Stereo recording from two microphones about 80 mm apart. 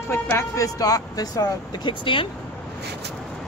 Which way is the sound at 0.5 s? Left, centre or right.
Left.